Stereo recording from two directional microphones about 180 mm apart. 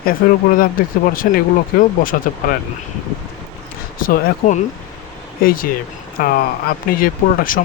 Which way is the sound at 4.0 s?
50° left (ahead or behind).